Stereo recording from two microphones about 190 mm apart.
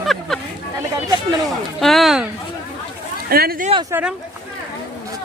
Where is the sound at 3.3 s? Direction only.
50° right (ahead or behind).